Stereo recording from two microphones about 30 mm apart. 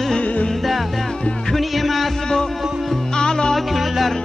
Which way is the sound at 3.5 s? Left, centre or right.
Centre.